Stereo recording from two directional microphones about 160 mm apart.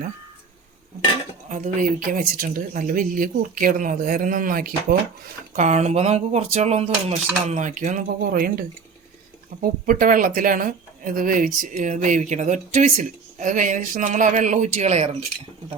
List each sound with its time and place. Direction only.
1.5 s speech: 50° right (ahead or behind)
5.5 s speech: 45° right (ahead or behind)